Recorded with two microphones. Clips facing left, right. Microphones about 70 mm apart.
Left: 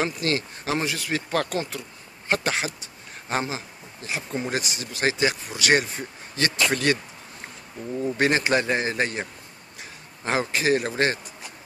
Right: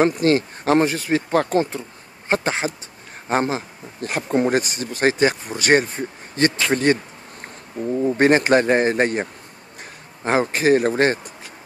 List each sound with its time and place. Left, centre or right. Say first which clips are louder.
0.0 s speech: right 9 dB; right
10.2 s speech: right 6 dB; right